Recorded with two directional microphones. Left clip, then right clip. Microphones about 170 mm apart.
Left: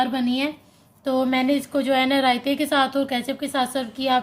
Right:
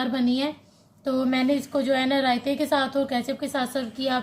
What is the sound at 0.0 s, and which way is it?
A woman's voice, 25° left (ahead or behind).